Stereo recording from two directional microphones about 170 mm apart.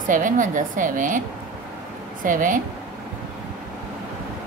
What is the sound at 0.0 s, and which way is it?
A woman's voice, 50° right (ahead or behind).